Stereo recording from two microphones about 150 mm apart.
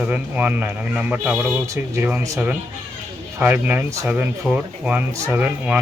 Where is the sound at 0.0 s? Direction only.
10° right (ahead or behind).